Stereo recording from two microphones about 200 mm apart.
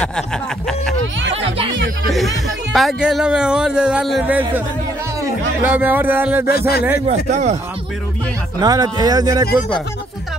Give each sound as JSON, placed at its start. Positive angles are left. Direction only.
{"t": 1.3, "sound": "speech", "side_deg": -25}
{"t": 2.0, "sound": "speech", "side_deg": 0}
{"t": 5.6, "sound": "music", "side_deg": -10}
{"t": 7.1, "sound": "speech", "side_deg": -35}
{"t": 8.5, "sound": "speech", "side_deg": -20}